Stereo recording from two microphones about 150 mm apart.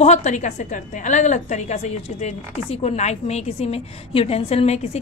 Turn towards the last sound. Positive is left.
turn(degrees=45)  # may be behind; listen again after turning